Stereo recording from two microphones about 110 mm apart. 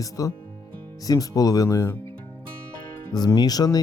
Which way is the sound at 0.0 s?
30° left (ahead or behind).